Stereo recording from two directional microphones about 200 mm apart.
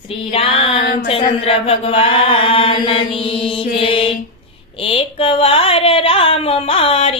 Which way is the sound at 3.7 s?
25° left (ahead or behind).